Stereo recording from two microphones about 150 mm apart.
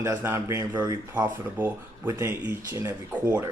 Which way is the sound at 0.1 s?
15° right (ahead or behind).